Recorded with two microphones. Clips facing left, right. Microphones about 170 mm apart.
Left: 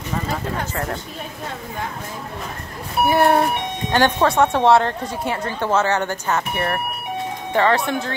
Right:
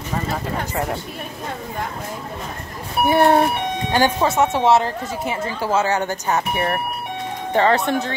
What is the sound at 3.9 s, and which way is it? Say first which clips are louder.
Speech: left 1 dB; 5° right (ahead or behind).